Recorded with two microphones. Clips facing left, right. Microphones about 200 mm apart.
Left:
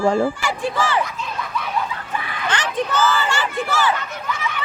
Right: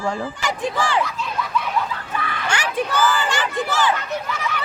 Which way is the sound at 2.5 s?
10° right (ahead or behind).